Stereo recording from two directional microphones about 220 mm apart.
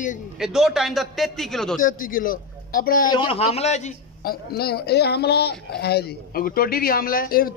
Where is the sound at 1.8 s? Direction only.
40° left (ahead or behind).